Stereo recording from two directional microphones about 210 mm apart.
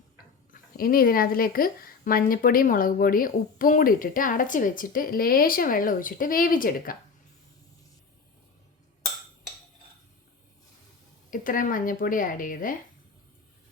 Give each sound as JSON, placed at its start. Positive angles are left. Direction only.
{"t": 0.5, "sound": "speech", "side_deg": 45}
{"t": 11.3, "sound": "speech", "side_deg": 40}